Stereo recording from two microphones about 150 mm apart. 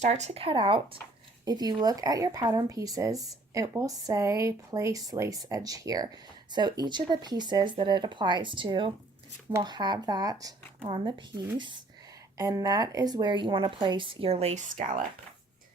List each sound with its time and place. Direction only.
0.0 s speech: 45° right (ahead or behind); by 10.5 s 25° right (ahead or behind)
10.8 s speech: 35° right (ahead or behind); by 15.0 s 60° right (ahead or behind)